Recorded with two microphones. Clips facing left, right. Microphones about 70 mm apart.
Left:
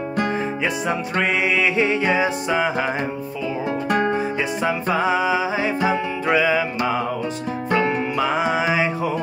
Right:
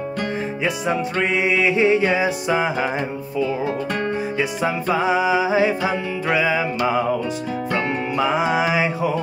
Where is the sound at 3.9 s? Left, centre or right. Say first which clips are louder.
Left 4 dB; centre.